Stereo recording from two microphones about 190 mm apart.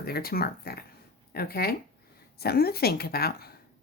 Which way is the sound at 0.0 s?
55° left (ahead or behind).